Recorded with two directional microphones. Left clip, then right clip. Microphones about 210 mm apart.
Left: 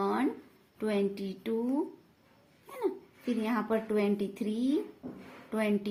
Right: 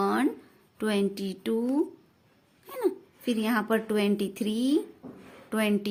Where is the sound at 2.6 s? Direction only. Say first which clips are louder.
Right 5 dB; 40° right (ahead or behind).